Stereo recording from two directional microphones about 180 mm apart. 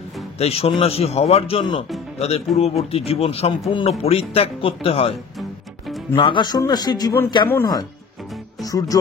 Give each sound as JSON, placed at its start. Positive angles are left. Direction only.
{"t": 0.4, "sound": "speech", "side_deg": 35}
{"t": 6.1, "sound": "a man's voice", "side_deg": 25}
{"t": 8.6, "sound": "a man's voice", "side_deg": 20}